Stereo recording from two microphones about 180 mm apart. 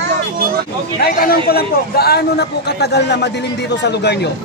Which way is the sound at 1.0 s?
55° left (ahead or behind).